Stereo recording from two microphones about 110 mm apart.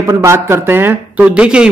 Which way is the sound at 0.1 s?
25° right (ahead or behind).